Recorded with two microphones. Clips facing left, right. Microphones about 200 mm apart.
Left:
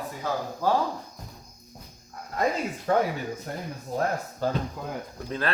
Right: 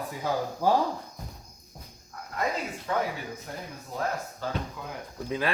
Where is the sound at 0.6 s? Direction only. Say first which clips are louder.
Right 1 dB; 15° right (ahead or behind).